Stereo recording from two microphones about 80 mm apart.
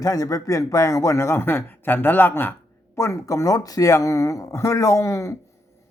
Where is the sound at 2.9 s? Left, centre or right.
Left.